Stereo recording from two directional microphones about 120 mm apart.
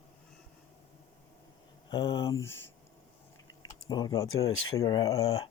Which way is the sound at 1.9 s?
35° left (ahead or behind).